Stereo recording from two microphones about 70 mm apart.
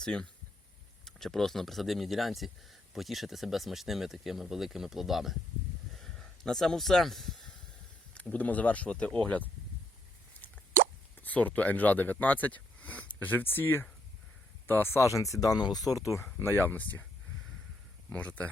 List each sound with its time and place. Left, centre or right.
0.0 s speech: centre
5.9 s a sound: centre
8.1 s speech: left
11.2 s speech: left
16.2 s speech: left